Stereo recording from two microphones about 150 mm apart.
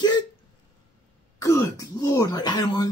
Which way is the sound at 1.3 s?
25° left (ahead or behind).